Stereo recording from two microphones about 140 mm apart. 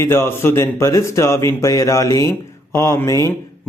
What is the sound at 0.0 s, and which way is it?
Speech, 20° left (ahead or behind).